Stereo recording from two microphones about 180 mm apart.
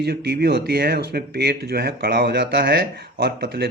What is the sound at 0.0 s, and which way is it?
Speech, 65° right (ahead or behind).